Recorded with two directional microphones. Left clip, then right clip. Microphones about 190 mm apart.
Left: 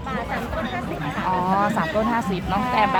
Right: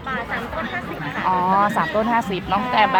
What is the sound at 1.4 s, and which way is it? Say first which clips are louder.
Speech: right 4 dB; 30° right (ahead or behind).